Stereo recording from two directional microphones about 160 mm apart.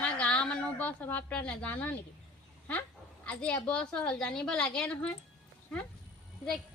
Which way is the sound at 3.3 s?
10° left (ahead or behind).